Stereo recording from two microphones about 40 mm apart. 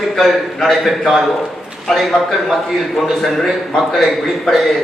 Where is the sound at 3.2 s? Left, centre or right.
Centre.